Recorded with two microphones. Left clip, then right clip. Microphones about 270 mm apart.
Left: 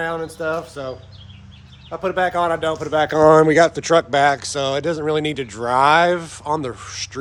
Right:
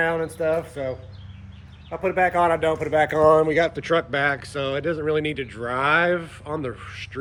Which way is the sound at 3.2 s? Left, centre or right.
Left.